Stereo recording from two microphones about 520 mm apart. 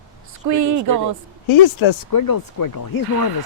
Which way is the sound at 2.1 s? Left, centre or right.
Left.